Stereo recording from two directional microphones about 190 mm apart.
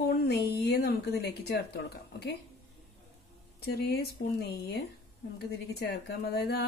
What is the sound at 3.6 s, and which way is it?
Speech, 55° left (ahead or behind).